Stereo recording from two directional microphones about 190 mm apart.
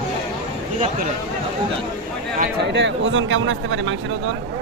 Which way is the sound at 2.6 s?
65° right (ahead or behind).